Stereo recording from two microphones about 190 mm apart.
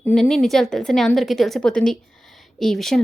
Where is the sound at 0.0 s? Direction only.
Centre (ahead or behind).